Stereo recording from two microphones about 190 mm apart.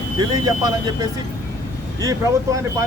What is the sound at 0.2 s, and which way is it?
Speech, 20° right (ahead or behind).